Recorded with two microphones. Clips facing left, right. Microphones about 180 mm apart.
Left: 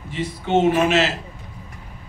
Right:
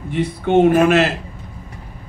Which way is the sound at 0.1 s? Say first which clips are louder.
Right 5 dB; 55° right (ahead or behind).